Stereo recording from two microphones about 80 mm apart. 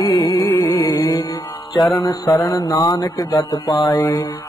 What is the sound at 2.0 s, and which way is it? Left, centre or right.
Mantra, left.